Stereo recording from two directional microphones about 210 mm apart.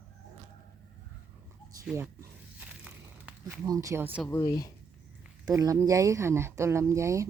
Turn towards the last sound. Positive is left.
turn(degrees=-15)  # may be behind; listen again after turning